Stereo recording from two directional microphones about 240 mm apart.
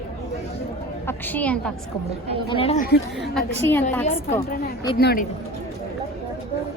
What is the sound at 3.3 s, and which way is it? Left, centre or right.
Speech, centre.